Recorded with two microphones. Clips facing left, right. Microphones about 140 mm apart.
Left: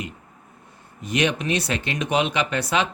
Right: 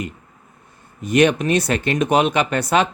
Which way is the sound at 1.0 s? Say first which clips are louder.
Right 7 dB; 50° right (ahead or behind).